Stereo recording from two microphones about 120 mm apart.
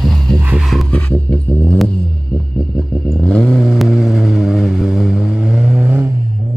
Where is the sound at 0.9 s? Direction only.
10° left (ahead or behind).